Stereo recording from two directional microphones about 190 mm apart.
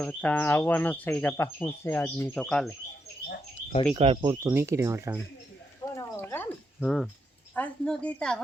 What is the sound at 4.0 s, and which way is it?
Speech, 25° right (ahead or behind).